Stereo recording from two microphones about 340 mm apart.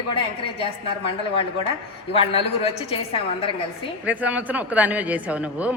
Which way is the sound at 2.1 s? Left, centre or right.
Centre.